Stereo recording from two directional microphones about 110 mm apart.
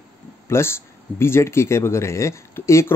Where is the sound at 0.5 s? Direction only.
25° left (ahead or behind).